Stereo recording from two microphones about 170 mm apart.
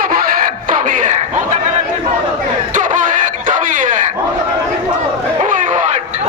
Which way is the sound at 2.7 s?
50° right (ahead or behind).